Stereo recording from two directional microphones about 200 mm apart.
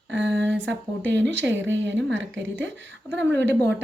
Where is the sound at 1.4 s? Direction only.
65° right (ahead or behind).